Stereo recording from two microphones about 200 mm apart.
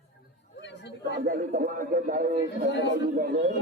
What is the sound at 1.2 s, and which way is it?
Speech, 45° right (ahead or behind).